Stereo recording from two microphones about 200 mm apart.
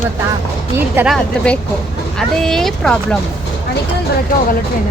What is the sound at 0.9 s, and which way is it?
Speech, 10° right (ahead or behind).